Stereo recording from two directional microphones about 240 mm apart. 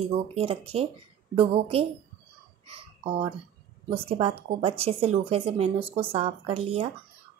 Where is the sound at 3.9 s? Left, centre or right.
Right.